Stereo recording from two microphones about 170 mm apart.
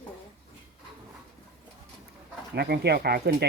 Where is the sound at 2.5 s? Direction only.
70° right (ahead or behind).